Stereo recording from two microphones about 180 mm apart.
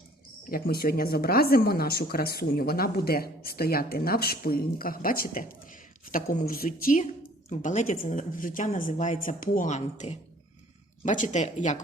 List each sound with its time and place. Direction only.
0.5 s speech: 55° left (ahead or behind); by 11.8 s 40° left (ahead or behind)